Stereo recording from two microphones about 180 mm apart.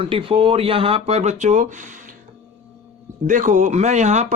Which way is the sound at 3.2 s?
45° right (ahead or behind).